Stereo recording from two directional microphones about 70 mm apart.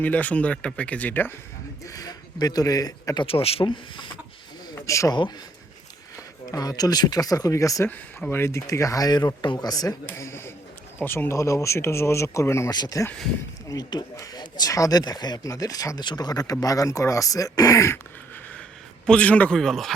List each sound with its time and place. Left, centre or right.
0.0 s speech: left
1.8 s speech: left
4.7 s a sound: left
6.4 s speech: left
8.3 s speech: left
9.0 s a man's voice: left
10.2 s a man's voice: left
12.7 s speech: left
19.0 s speech: centre
19.5 s speech: centre